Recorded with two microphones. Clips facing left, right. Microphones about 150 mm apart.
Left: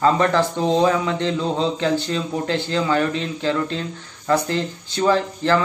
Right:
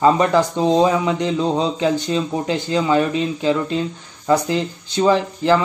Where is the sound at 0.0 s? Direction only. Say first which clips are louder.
Right 2 dB; 15° right (ahead or behind).